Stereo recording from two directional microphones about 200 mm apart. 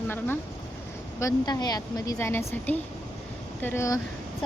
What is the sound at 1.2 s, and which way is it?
Speech, 20° left (ahead or behind).